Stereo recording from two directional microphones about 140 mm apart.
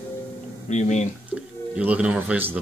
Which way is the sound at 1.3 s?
10° right (ahead or behind).